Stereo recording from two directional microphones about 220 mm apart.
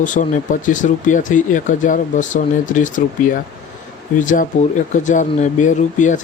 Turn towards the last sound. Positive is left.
turn(degrees=35)  # may be behind; listen again after turning